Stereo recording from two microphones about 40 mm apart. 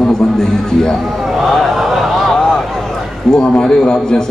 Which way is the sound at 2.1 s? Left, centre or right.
Centre.